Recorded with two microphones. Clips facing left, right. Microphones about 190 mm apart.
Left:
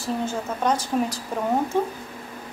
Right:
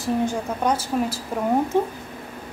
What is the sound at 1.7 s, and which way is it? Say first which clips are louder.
Speech: right 2 dB; 15° right (ahead or behind).